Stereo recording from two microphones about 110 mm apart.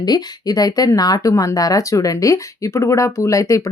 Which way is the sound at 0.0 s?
35° left (ahead or behind).